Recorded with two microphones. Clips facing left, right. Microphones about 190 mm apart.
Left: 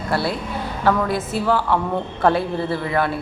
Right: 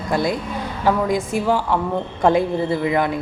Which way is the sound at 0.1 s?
15° right (ahead or behind).